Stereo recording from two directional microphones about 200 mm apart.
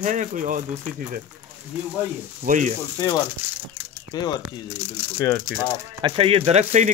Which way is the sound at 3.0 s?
20° left (ahead or behind).